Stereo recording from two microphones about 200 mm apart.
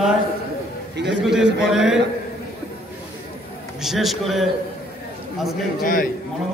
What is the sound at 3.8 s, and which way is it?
Speech, centre (ahead or behind).